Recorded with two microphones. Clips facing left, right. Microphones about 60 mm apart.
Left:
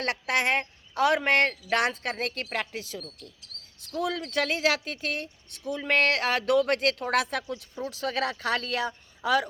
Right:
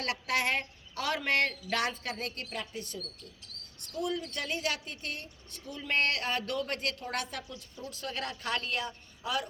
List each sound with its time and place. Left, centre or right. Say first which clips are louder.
0.0 s a woman's voice: left 4 dB; left
1.7 s speech: left 6 dB; left
2.5 s speech: left 6 dB; left
5.2 s speech: left 10 dB; left